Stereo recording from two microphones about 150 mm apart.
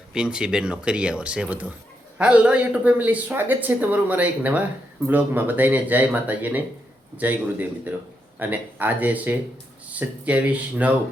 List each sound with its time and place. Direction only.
0.1 s speech: 5° right (ahead or behind)